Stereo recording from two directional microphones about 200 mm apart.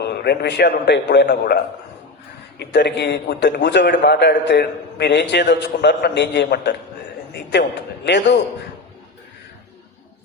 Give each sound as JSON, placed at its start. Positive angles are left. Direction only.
{"t": 0.0, "sound": "a man's voice", "side_deg": 55}